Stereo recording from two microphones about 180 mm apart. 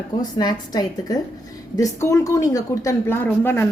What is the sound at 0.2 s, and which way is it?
A woman's voice, 20° left (ahead or behind).